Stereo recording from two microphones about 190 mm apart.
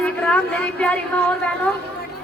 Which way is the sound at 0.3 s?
5° left (ahead or behind).